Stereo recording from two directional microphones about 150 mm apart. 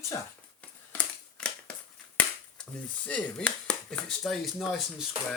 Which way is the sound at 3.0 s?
10° left (ahead or behind).